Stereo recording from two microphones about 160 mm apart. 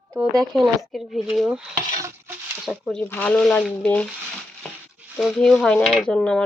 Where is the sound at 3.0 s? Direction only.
10° left (ahead or behind).